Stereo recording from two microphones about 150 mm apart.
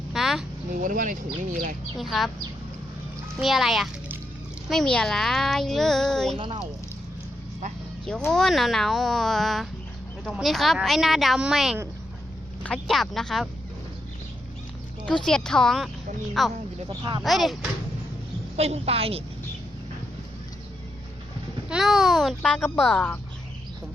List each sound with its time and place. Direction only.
0.1 s a sound: 5° right (ahead or behind)
0.7 s speech: 65° right (ahead or behind)
2.0 s speech: centre (ahead or behind)
3.4 s speech: centre (ahead or behind)
6.3 s a woman's voice: 35° right (ahead or behind)
8.3 s speech: centre (ahead or behind)
15.0 s speech: 5° left (ahead or behind)
16.9 s a woman's voice: 30° right (ahead or behind)
17.2 s speech: centre (ahead or behind)
18.5 s a woman's voice: 45° right (ahead or behind)
21.7 s speech: centre (ahead or behind)
22.4 s speech: 10° left (ahead or behind)